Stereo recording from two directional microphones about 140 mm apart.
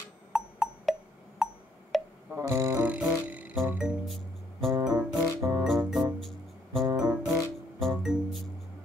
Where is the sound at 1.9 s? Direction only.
Centre (ahead or behind).